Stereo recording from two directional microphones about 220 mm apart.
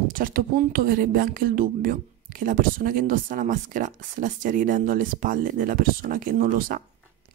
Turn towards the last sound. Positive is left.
turn(degrees=-40)  # may be behind; listen again after turning